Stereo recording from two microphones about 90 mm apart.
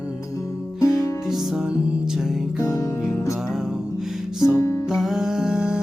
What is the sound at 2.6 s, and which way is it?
Music, 40° left (ahead or behind).